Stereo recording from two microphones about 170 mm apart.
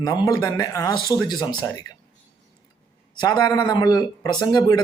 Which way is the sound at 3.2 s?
20° left (ahead or behind).